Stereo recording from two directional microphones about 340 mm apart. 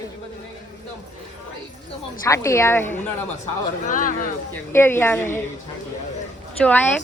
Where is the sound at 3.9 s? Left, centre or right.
Left.